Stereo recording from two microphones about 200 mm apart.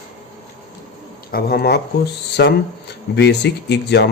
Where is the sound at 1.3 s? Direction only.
50° left (ahead or behind).